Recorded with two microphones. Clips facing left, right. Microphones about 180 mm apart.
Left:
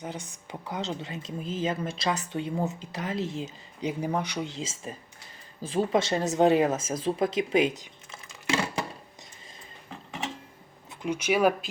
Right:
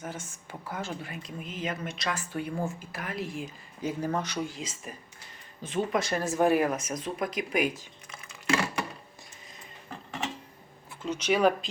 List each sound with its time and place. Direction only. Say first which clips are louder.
0.0 s speech: left 2 dB; 15° left (ahead or behind)
11.0 s speech: left 1 dB; 10° left (ahead or behind)